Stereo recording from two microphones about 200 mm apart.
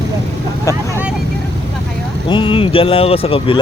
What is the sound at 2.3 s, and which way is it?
Speech, 25° left (ahead or behind).